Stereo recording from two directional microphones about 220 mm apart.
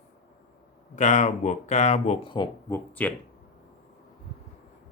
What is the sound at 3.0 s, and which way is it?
Speech, 5° left (ahead or behind).